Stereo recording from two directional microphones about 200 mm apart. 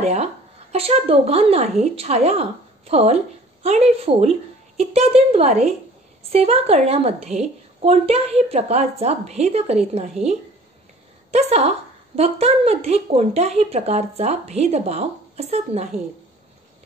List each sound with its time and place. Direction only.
0.0 s a woman's voice: 30° right (ahead or behind)
11.3 s a woman's voice: 30° right (ahead or behind)